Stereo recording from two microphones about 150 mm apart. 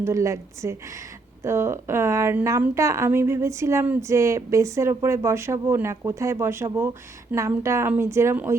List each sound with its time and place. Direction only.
0.0 s a woman's voice: 20° right (ahead or behind)